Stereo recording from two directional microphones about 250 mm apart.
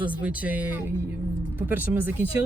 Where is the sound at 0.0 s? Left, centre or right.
Centre.